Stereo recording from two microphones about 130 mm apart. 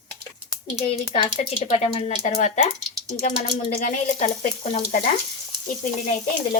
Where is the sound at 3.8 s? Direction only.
80° left.